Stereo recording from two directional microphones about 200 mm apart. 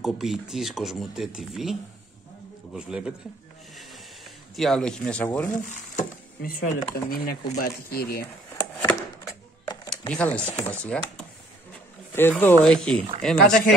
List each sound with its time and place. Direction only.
0.0 s speech: centre (ahead or behind)
4.6 s speech: centre (ahead or behind)
5.5 s speech: 40° left (ahead or behind)
8.7 s a sound: 5° left (ahead or behind)
9.8 s speech: 5° left (ahead or behind)
12.1 s speech: 10° left (ahead or behind)